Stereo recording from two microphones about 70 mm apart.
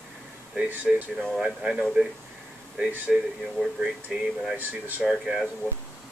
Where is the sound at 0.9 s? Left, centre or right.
Centre.